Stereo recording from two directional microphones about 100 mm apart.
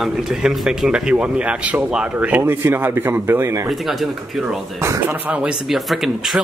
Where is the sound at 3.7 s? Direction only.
Centre (ahead or behind).